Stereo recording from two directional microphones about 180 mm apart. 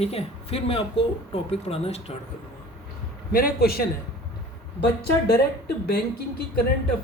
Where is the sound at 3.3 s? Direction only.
55° left (ahead or behind).